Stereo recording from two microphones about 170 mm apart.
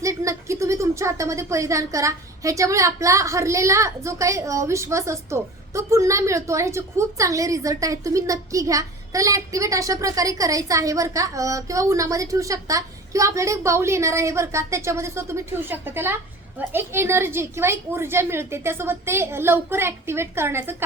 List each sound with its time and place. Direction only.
0.0 s a woman's voice: 20° right (ahead or behind)